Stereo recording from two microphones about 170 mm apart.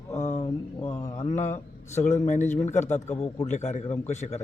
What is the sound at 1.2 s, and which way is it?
A man's voice, 45° left (ahead or behind).